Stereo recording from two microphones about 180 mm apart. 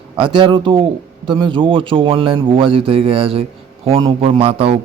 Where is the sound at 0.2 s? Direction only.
30° right (ahead or behind).